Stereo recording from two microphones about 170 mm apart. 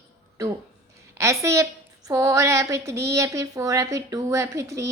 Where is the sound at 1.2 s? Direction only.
15° right (ahead or behind).